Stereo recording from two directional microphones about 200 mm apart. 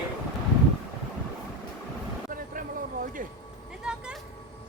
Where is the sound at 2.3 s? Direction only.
45° right (ahead or behind).